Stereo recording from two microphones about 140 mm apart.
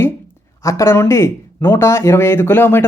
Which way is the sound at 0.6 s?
20° left (ahead or behind).